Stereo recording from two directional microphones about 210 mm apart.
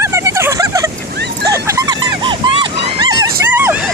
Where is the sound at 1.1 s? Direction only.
50° right (ahead or behind).